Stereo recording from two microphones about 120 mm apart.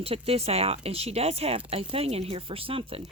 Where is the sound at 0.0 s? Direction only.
55° right (ahead or behind).